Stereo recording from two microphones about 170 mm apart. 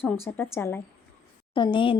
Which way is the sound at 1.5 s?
30° left (ahead or behind).